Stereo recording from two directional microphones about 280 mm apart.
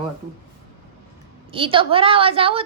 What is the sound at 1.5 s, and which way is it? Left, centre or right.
A woman's voice, centre.